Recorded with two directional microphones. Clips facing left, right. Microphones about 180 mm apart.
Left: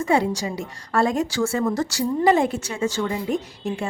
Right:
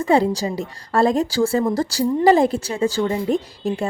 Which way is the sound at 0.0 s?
35° right (ahead or behind).